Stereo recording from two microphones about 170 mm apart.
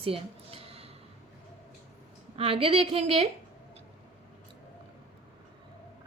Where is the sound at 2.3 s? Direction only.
35° right (ahead or behind).